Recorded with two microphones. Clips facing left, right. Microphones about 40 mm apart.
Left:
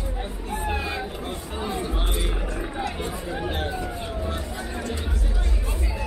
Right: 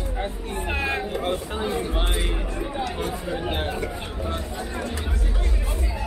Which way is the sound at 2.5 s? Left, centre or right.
Centre.